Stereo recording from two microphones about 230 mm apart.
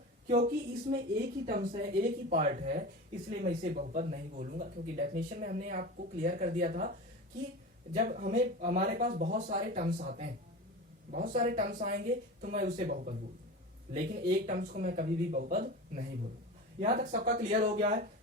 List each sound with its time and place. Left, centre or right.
0.3 s speech: right
7.9 s speech: right